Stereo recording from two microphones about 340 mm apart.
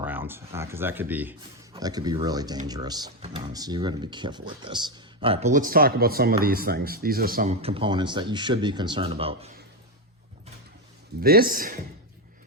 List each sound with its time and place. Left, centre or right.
0.0 s speech: centre
11.2 s a man's voice: right